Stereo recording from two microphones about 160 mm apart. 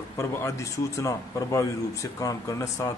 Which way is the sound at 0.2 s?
15° left (ahead or behind).